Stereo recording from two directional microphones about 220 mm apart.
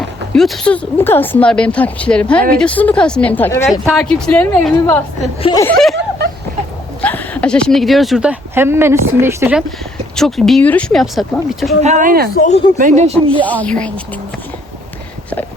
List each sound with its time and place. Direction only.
0.3 s speech: centre (ahead or behind)
5.4 s speech: 20° left (ahead or behind)
5.6 s speech: centre (ahead or behind)
7.0 s speech: 5° left (ahead or behind); by 9.6 s 10° right (ahead or behind)
10.2 s speech: centre (ahead or behind)
11.8 s speech: 35° right (ahead or behind)
12.8 s speech: 30° right (ahead or behind)
13.4 s speech: 5° left (ahead or behind)